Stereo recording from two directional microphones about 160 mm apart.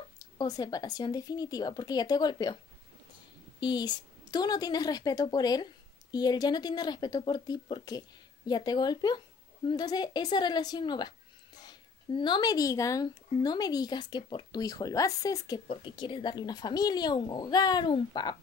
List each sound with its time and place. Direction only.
0.2 s speech: 25° left (ahead or behind)
3.6 s speech: 25° left (ahead or behind)